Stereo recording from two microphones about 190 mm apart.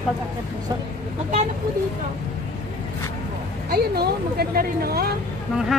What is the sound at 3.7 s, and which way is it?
A woman's voice, 55° right (ahead or behind).